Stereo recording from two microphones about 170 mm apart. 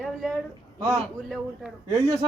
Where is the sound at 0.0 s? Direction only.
Centre (ahead or behind).